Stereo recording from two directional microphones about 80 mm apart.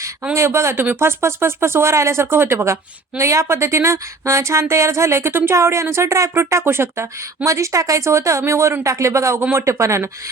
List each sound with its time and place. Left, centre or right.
0.3 s speech: right